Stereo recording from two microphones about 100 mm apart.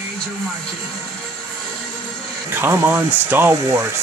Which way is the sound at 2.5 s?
20° right (ahead or behind).